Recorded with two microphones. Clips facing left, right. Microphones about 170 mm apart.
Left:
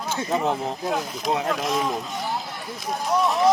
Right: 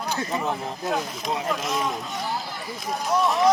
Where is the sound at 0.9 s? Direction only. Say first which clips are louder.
Left 1 dB; centre (ahead or behind).